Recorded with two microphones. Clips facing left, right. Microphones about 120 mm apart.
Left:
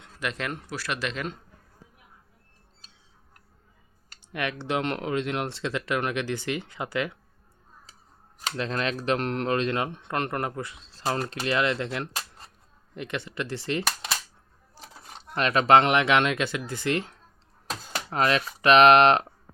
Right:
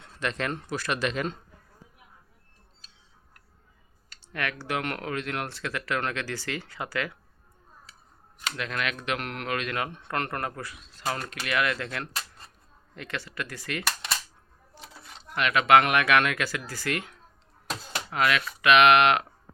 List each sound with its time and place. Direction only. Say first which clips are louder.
0.0 s speech: right 1 dB; 5° left (ahead or behind)
4.3 s speech: left 2 dB; 20° left (ahead or behind)
8.4 s speech: left 3 dB; 35° left (ahead or behind)
14.7 s a sound: even; 35° left (ahead or behind)
15.4 s speech: left 1 dB; 35° left (ahead or behind)